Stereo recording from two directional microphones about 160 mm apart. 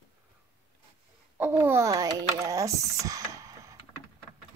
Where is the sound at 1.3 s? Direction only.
10° right (ahead or behind).